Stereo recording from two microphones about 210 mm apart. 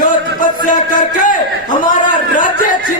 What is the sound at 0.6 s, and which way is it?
A man's voice, 40° left (ahead or behind).